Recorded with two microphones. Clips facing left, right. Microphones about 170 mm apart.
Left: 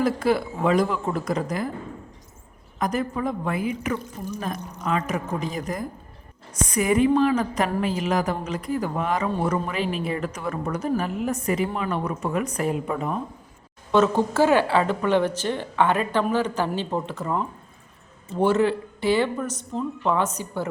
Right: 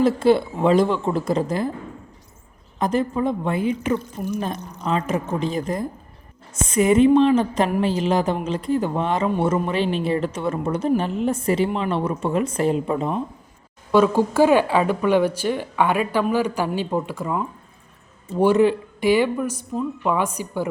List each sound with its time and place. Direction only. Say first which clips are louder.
0.0 s a woman's voice: right 5 dB; 25° right (ahead or behind)
2.7 s a woman's voice: right 4 dB; 30° right (ahead or behind)
13.9 s speech: right 3 dB; 10° right (ahead or behind)